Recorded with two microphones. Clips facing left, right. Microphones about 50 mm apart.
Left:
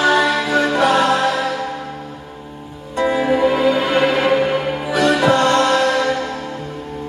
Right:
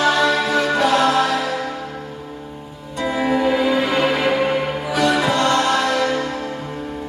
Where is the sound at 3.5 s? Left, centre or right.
Left.